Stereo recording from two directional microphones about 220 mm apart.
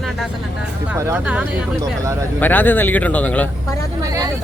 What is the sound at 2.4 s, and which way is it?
Speech, 10° left (ahead or behind).